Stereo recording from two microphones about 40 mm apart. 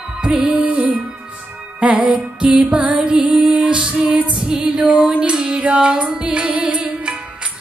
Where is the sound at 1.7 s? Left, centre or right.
Right.